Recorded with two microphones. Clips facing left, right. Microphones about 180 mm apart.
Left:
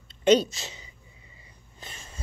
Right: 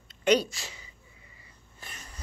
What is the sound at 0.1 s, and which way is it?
Speech, 25° left (ahead or behind).